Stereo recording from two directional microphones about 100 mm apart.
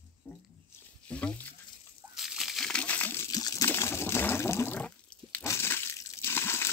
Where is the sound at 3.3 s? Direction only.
35° left (ahead or behind).